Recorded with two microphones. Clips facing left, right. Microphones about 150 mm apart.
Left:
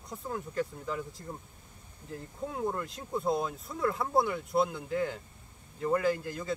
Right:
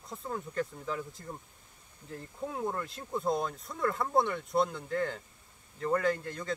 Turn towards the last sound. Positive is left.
turn(degrees=5)  # may be behind; listen again after turning